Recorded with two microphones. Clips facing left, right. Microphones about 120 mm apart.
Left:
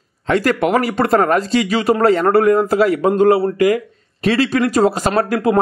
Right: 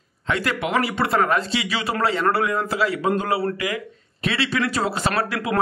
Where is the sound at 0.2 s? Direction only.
40° left (ahead or behind).